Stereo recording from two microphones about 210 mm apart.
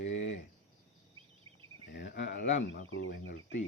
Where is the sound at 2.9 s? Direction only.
70° left (ahead or behind).